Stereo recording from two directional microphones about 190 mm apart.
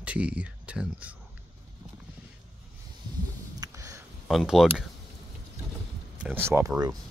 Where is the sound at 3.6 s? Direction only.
15° right (ahead or behind).